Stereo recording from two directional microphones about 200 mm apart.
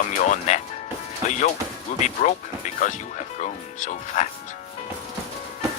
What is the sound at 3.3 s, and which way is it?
Speech, 35° left (ahead or behind).